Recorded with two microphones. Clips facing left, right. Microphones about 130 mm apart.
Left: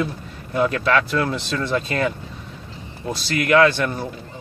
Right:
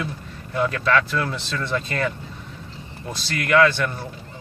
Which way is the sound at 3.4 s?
15° left (ahead or behind).